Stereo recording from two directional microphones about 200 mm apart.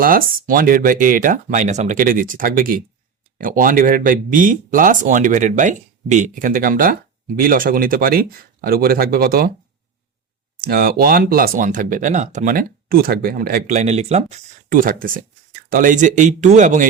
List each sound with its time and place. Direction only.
0.0 s speech: 45° right (ahead or behind)
10.6 s speech: 45° right (ahead or behind)